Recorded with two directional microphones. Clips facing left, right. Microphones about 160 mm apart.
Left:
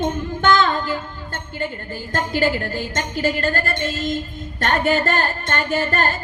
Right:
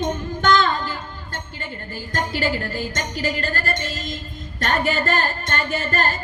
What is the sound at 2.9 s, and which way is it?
Music, 45° left (ahead or behind).